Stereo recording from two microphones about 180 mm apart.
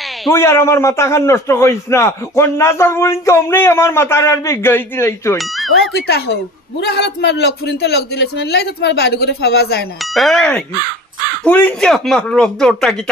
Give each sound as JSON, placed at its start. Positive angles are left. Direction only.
{"t": 0.3, "sound": "a man's voice", "side_deg": 15}
{"t": 5.9, "sound": "a man's voice", "side_deg": 60}
{"t": 10.1, "sound": "speech", "side_deg": 0}